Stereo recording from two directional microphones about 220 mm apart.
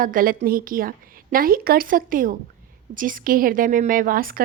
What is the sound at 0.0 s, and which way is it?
A woman's voice, 40° right (ahead or behind).